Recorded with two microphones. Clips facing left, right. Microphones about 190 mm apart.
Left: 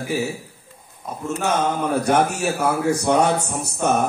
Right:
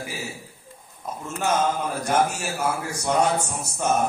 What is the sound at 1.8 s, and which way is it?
A man's voice, 65° left (ahead or behind).